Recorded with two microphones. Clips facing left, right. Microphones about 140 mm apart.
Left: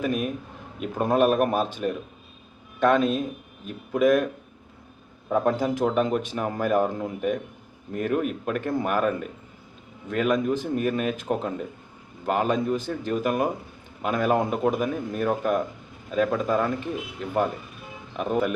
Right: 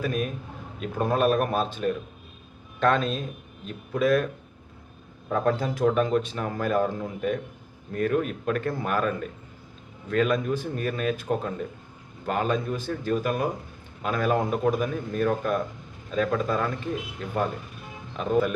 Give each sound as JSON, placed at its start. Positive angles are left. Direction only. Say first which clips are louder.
{"t": 0.0, "sound": "speech", "louder": "left 2 dB", "side_deg": 15}
{"t": 5.3, "sound": "speech", "louder": "left 2 dB", "side_deg": 10}